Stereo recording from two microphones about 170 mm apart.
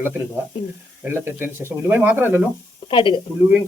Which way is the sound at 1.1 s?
15° right (ahead or behind).